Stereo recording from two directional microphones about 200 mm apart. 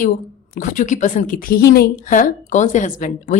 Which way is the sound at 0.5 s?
40° left (ahead or behind).